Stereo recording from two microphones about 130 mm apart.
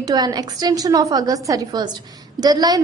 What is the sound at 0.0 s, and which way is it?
A woman's voice, 30° right (ahead or behind).